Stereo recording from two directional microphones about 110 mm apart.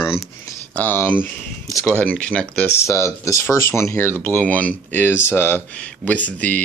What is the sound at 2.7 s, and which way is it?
Speech, 25° left (ahead or behind).